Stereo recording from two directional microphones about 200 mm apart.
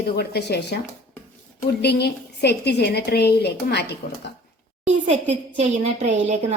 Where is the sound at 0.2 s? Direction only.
55° left (ahead or behind).